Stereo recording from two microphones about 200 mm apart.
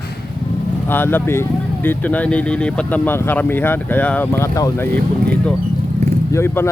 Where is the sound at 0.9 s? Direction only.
10° left (ahead or behind).